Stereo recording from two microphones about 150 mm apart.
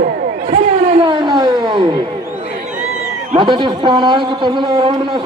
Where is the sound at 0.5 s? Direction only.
40° right (ahead or behind).